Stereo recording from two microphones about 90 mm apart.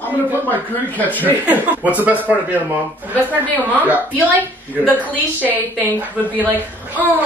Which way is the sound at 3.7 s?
20° right (ahead or behind).